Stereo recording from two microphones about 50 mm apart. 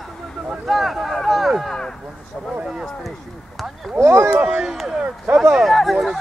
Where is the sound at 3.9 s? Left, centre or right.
Right.